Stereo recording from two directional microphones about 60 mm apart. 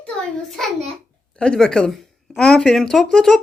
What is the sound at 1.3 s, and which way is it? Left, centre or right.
Speech, centre.